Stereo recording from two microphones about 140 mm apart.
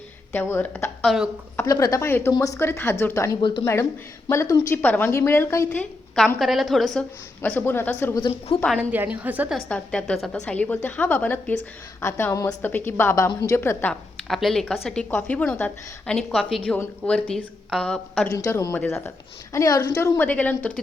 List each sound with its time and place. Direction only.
0.3 s a woman's voice: 15° left (ahead or behind)
1.0 s a woman's voice: centre (ahead or behind)
1.6 s a woman's voice: 25° left (ahead or behind)
3.4 s speech: 35° left (ahead or behind)
4.3 s a woman's voice: 20° left (ahead or behind)
5.8 s a woman's voice: centre (ahead or behind)
7.4 s a woman's voice: 15° left (ahead or behind)
8.8 s a woman's voice: 10° right (ahead or behind)
9.6 s a woman's voice: 5° left (ahead or behind)
14.3 s a woman's voice: centre (ahead or behind)
18.3 s a woman's voice: 20° left (ahead or behind)